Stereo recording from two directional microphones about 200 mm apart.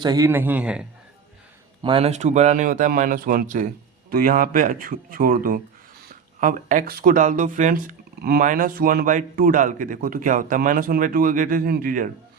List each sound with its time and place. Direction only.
0.0 s a man's voice: 20° right (ahead or behind)
1.8 s speech: 25° right (ahead or behind); by 12.0 s 45° right (ahead or behind)